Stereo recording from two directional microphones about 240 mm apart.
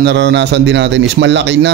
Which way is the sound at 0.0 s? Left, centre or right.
Right.